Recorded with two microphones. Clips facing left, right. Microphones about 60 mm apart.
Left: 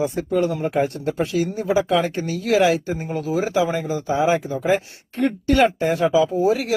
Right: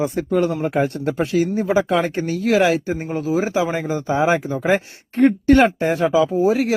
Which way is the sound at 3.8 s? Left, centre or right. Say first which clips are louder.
Right 1 dB; right.